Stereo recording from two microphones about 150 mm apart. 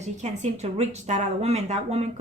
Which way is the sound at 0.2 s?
50° right (ahead or behind).